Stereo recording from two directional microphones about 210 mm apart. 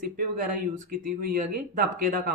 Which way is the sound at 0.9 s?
40° right (ahead or behind).